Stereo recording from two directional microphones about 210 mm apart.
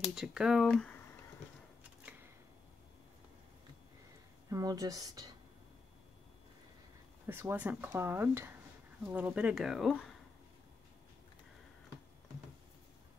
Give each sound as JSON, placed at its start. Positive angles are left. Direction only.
{"t": 0.0, "sound": "speech", "side_deg": 0}
{"t": 4.5, "sound": "speech", "side_deg": -15}
{"t": 7.2, "sound": "speech", "side_deg": -10}